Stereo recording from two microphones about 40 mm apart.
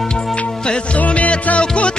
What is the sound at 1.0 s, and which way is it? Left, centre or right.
Music, left.